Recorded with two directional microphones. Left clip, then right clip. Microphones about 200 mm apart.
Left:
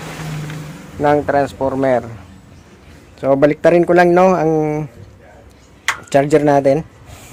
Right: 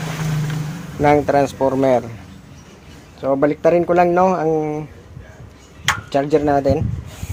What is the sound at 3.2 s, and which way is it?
Speech, 30° left (ahead or behind).